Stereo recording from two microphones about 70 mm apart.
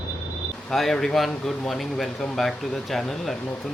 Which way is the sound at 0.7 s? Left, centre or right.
Centre.